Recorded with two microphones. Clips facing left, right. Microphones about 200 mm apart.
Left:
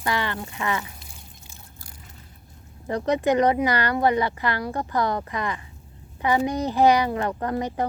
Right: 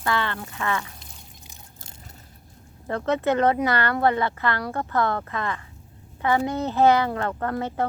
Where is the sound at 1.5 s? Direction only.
20° right (ahead or behind).